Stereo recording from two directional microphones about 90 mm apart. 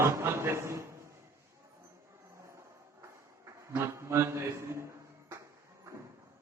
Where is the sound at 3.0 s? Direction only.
30° right (ahead or behind).